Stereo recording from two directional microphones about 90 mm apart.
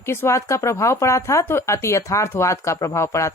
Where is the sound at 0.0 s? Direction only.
30° left (ahead or behind).